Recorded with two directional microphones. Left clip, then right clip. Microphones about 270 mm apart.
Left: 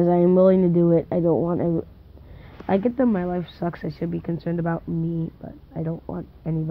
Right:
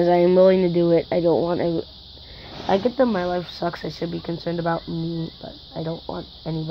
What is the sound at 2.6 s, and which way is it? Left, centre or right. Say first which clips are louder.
Speech: right 2 dB; centre.